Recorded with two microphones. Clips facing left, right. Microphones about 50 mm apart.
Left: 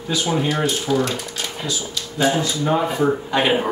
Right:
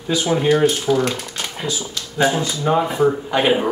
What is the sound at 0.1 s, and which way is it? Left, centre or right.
Speech, centre.